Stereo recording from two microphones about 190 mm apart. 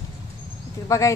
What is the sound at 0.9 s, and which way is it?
Speech, 15° left (ahead or behind).